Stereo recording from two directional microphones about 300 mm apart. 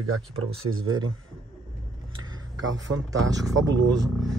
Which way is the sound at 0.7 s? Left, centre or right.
Right.